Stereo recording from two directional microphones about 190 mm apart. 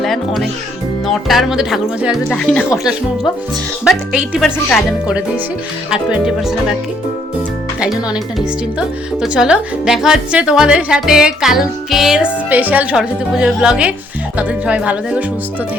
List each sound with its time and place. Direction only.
0.0 s speech: centre (ahead or behind)
3.8 s speech: 5° right (ahead or behind)
9.2 s speech: 5° right (ahead or behind)